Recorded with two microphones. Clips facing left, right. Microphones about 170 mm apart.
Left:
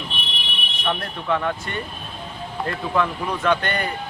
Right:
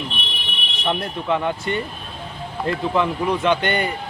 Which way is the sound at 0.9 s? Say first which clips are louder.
Right 2 dB; 15° right (ahead or behind).